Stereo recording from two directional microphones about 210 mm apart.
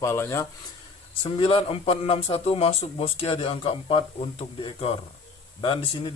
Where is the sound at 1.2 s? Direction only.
25° left (ahead or behind).